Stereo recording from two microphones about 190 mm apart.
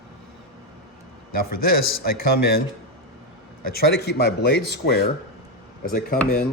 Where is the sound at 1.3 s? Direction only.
50° left (ahead or behind).